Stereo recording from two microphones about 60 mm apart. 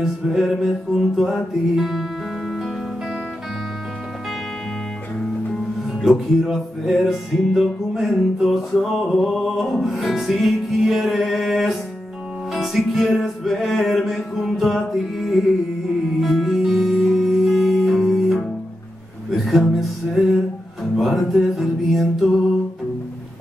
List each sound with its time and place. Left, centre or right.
0.0 s music: centre
5.9 s music: centre